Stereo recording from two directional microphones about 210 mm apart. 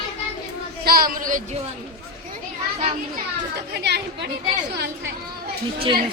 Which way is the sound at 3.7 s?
50° right (ahead or behind).